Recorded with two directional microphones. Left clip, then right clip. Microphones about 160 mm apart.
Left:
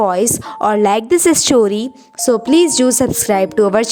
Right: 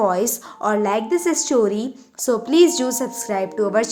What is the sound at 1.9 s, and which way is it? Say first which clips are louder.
A woman's voice: left 6 dB; 45° left (ahead or behind).